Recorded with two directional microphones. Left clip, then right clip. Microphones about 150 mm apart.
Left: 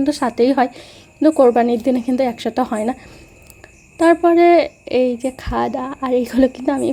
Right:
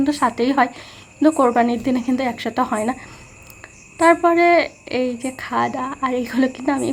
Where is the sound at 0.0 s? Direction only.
45° left (ahead or behind).